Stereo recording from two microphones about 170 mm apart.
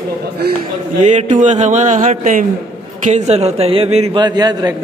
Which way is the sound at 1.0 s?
45° right (ahead or behind).